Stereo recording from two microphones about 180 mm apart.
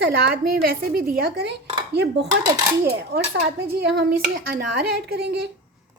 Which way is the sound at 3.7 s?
60° right (ahead or behind).